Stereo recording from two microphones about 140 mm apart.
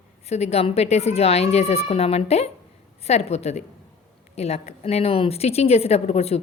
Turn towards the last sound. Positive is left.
turn(degrees=50)  # may be behind; listen again after turning